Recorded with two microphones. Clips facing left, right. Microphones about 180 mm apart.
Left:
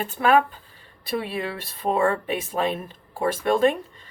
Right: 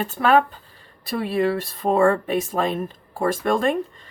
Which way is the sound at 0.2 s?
40° right (ahead or behind).